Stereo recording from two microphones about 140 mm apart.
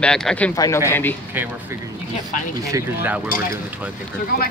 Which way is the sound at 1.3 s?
15° right (ahead or behind).